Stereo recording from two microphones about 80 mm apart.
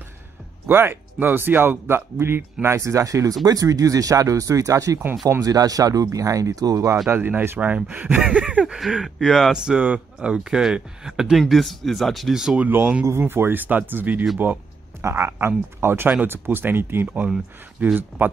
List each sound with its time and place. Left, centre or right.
0.7 s speech: right
7.1 s speech: right
12.6 s speech: right
14.4 s a sound: right
15.0 s speech: right